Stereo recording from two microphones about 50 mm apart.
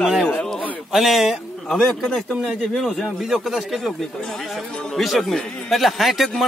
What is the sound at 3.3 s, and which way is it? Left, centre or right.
Speech, centre.